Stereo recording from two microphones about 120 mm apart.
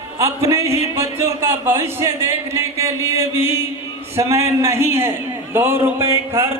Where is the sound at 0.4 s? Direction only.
25° right (ahead or behind).